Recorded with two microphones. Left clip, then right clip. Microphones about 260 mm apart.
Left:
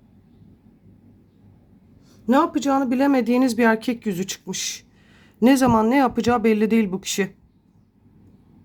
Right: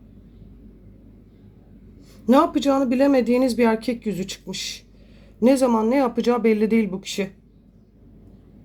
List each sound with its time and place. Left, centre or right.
2.0 s speech: centre